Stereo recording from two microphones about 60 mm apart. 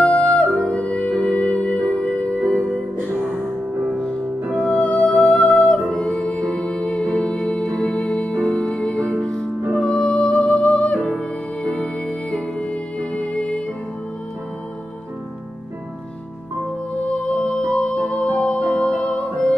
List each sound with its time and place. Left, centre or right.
0.0 s music: centre
4.6 s music: centre
17.0 s music: centre